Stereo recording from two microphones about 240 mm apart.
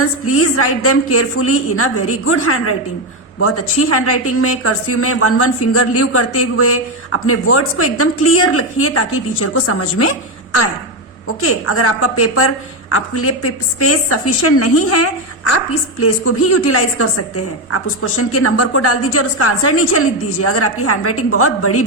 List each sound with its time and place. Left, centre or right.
0.0 s a woman's voice: left